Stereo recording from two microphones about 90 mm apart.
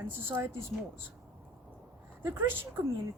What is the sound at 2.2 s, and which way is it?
Speech, 25° right (ahead or behind).